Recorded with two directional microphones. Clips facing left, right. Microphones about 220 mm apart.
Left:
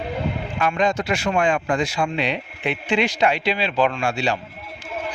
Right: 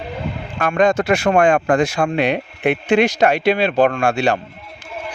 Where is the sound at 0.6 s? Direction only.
50° right (ahead or behind).